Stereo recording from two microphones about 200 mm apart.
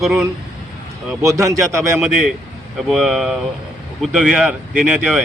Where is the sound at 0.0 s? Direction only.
Centre (ahead or behind).